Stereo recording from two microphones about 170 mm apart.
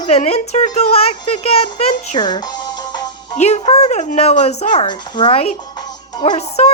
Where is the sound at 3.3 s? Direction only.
40° left (ahead or behind).